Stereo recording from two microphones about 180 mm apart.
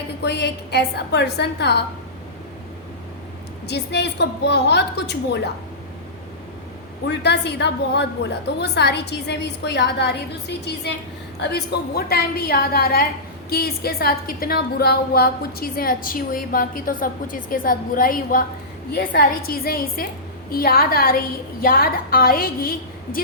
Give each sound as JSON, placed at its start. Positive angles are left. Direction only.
{"t": 0.2, "sound": "a woman's voice", "side_deg": 70}
{"t": 3.7, "sound": "a woman's voice", "side_deg": 70}
{"t": 7.1, "sound": "a woman's voice", "side_deg": 70}
{"t": 11.3, "sound": "a woman's voice", "side_deg": 65}